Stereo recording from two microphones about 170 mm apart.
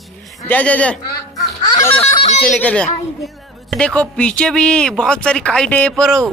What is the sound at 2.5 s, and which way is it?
A man's voice, 5° left (ahead or behind).